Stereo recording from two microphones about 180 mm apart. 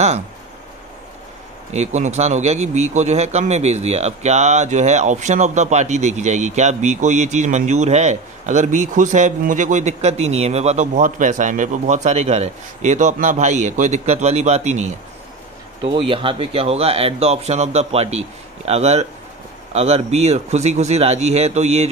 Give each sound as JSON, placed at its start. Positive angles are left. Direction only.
{"t": 1.7, "sound": "a man's voice", "side_deg": -40}
{"t": 15.8, "sound": "a man's voice", "side_deg": -30}